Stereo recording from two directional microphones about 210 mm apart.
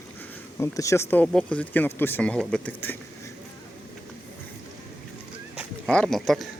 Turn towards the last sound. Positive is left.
turn(degrees=0)  # may be behind; listen again after turning